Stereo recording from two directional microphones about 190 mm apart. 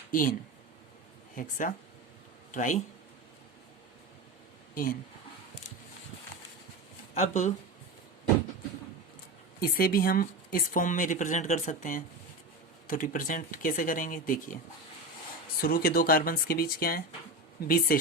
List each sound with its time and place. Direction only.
0.1 s speech: 45° left (ahead or behind)
1.4 s a woman's voice: 45° left (ahead or behind)
4.7 s a woman's voice: 45° left (ahead or behind)
7.1 s speech: 40° left (ahead or behind)
9.6 s a woman's voice: 50° left (ahead or behind)
15.6 s a woman's voice: 50° left (ahead or behind)